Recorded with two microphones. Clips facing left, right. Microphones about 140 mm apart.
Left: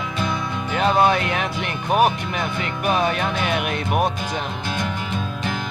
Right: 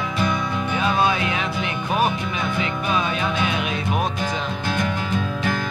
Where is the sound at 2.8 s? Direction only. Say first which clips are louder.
Left 5 dB; 60° left (ahead or behind).